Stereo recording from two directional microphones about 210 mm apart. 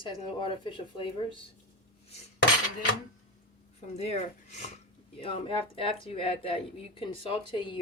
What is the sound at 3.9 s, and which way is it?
Speech, 30° left (ahead or behind).